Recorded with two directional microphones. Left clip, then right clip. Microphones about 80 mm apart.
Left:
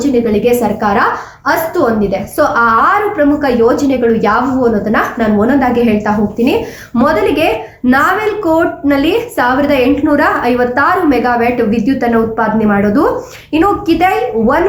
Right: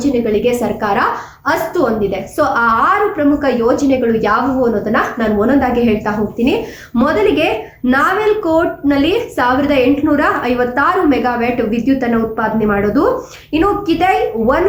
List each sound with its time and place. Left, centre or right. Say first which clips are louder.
0.3 s a woman's voice: left 3 dB; left
7.9 s a woman's voice: left 2 dB; left